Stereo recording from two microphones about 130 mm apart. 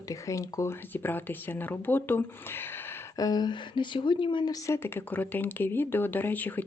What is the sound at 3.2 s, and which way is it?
Speech, 35° left (ahead or behind).